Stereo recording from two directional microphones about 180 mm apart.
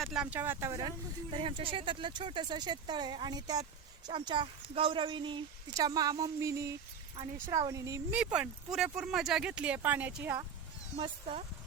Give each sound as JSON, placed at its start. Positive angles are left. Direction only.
{"t": 0.0, "sound": "speech", "side_deg": -5}
{"t": 8.2, "sound": "speech", "side_deg": -5}
{"t": 10.9, "sound": "speech", "side_deg": -35}